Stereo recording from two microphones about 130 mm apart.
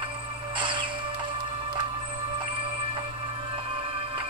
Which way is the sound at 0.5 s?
40° right (ahead or behind).